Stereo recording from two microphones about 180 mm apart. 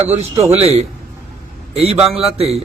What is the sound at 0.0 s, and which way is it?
A man's voice, 35° right (ahead or behind).